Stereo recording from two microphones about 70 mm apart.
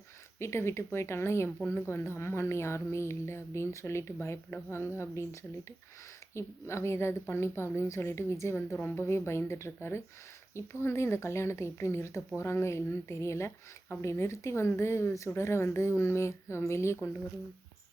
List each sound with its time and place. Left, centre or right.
0.3 s speech: left